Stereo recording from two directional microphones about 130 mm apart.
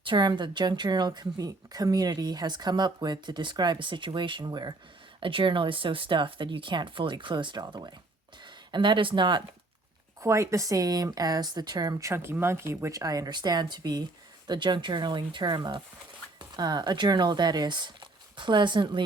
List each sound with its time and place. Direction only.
0.0 s speech: 35° right (ahead or behind)
10.2 s speech: 25° right (ahead or behind)